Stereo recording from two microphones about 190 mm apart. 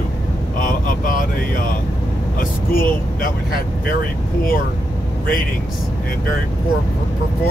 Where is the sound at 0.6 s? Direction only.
45° left (ahead or behind).